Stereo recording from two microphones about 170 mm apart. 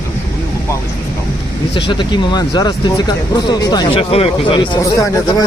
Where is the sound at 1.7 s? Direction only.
30° left (ahead or behind).